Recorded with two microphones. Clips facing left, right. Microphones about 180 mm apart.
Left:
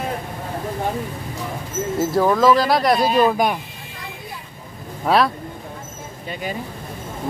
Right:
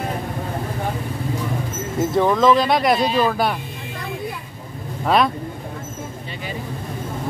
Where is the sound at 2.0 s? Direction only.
5° left (ahead or behind).